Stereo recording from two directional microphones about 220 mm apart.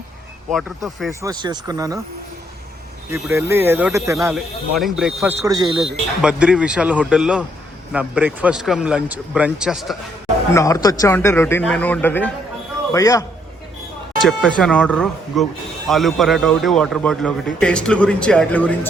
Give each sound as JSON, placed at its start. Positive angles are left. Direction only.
{"t": 1.2, "sound": "speech", "side_deg": -20}
{"t": 3.1, "sound": "speech", "side_deg": -10}
{"t": 4.8, "sound": "speech", "side_deg": 0}
{"t": 5.5, "sound": "speech", "side_deg": -20}
{"t": 5.8, "sound": "speech", "side_deg": -5}
{"t": 10.5, "sound": "a man's voice", "side_deg": 15}
{"t": 14.2, "sound": "speech", "side_deg": 5}